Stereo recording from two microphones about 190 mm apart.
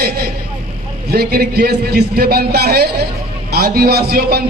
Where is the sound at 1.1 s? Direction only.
55° right (ahead or behind).